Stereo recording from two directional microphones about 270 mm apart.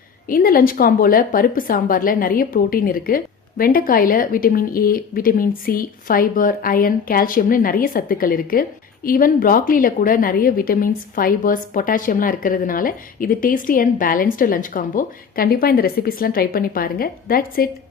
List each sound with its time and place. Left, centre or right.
0.3 s a woman's voice: left